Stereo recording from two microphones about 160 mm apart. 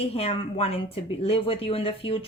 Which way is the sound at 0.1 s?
40° left (ahead or behind).